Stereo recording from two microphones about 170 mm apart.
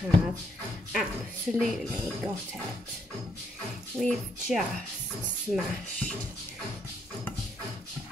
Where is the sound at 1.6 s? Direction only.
Centre (ahead or behind).